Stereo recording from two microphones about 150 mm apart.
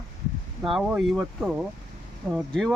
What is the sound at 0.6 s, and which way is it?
Speech, 5° right (ahead or behind).